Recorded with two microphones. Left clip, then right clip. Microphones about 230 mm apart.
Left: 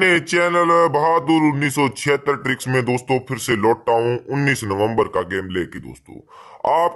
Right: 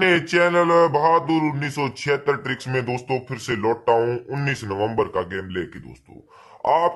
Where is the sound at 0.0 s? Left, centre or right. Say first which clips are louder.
Left 2 dB; left.